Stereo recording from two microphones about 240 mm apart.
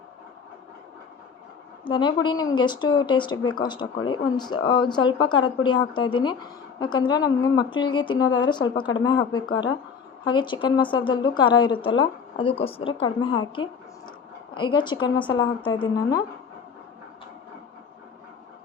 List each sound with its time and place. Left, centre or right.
1.8 s a woman's voice: centre